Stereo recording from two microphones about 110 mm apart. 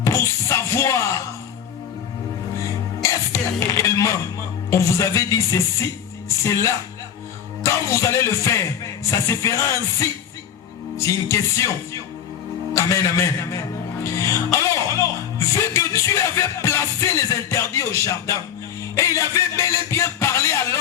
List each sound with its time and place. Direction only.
0.0 s music: 25° left (ahead or behind)
3.0 s music: 25° left (ahead or behind)
12.7 s a man's voice: 30° left (ahead or behind)
15.4 s music: 25° left (ahead or behind)